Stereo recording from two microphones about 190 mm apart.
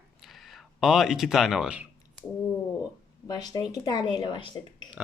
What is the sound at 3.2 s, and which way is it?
Speech, 20° left (ahead or behind).